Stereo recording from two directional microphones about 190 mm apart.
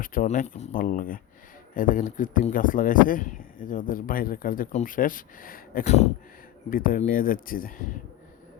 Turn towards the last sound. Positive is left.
turn(degrees=50)  # may be behind; listen again after turning